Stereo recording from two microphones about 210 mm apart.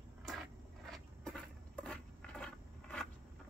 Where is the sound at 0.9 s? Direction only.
5° left (ahead or behind).